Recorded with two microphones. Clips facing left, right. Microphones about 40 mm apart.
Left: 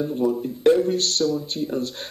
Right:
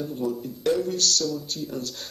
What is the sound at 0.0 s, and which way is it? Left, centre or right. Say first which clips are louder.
Speech: left 6 dB; left.